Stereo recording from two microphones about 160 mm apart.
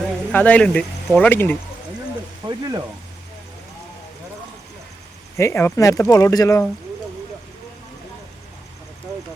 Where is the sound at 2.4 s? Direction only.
25° right (ahead or behind).